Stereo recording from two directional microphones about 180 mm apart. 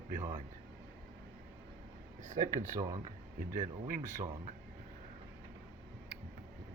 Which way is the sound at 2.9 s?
45° right (ahead or behind).